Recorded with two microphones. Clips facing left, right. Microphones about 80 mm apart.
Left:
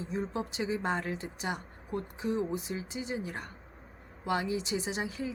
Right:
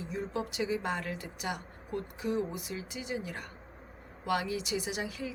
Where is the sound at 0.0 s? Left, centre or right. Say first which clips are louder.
Left 1 dB; left.